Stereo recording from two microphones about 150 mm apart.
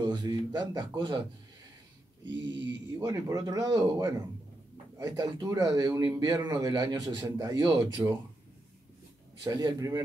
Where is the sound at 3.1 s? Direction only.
25° right (ahead or behind).